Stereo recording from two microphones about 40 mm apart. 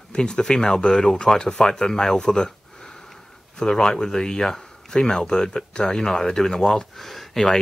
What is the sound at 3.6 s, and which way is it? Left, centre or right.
Speech, centre.